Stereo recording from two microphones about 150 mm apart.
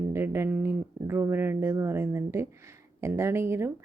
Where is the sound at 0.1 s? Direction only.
15° right (ahead or behind).